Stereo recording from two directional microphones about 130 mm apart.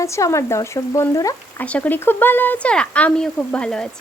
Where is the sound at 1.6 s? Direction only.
10° left (ahead or behind).